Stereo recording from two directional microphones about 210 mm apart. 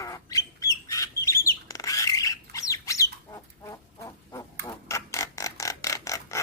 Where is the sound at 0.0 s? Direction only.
15° left (ahead or behind).